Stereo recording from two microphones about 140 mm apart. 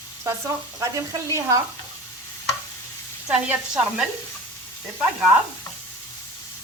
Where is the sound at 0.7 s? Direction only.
25° right (ahead or behind).